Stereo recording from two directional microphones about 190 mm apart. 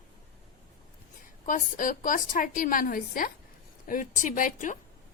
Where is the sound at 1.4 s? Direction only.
45° left (ahead or behind).